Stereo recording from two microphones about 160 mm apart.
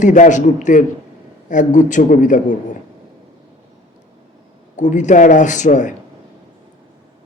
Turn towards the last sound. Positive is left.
turn(degrees=50)  # may be behind; listen again after turning